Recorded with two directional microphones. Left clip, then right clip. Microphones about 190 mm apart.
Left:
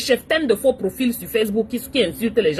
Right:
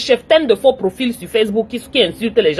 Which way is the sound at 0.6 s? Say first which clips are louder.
Right 5 dB; centre (ahead or behind).